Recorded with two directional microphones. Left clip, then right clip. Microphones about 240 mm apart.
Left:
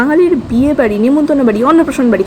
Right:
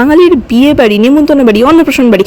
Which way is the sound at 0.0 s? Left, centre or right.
Right.